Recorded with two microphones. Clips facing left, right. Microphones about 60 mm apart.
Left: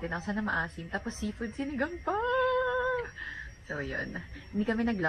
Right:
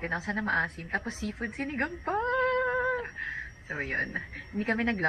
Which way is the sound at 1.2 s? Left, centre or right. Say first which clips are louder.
Right 1 dB; right.